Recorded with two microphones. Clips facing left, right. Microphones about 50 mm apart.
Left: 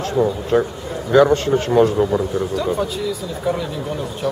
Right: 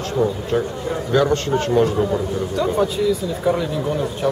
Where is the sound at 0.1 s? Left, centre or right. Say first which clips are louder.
Left 3 dB; centre.